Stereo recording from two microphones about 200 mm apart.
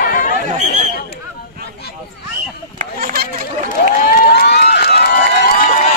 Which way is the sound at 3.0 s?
50° right (ahead or behind).